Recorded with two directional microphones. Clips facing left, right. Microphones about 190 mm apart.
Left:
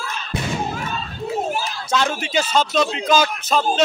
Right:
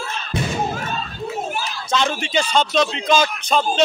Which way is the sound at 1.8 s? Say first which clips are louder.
Right 1 dB; 5° left (ahead or behind).